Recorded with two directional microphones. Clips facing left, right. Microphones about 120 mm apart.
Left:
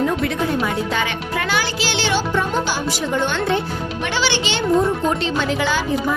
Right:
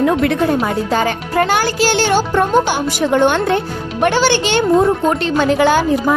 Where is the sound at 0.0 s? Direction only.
65° right (ahead or behind).